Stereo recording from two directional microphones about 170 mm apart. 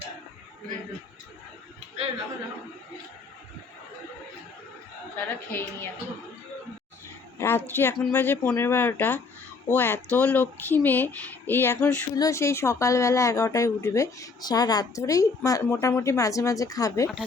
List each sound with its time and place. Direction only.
5.1 s speech: 10° left (ahead or behind)
7.3 s speech: 10° left (ahead or behind)